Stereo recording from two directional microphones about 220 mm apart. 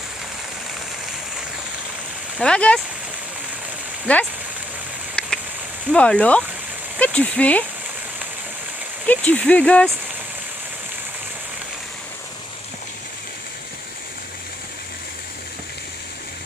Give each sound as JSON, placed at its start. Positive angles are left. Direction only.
{"t": 2.4, "sound": "speech", "side_deg": 5}
{"t": 4.0, "sound": "speech", "side_deg": 5}
{"t": 5.9, "sound": "speech", "side_deg": 5}
{"t": 9.0, "sound": "speech", "side_deg": 5}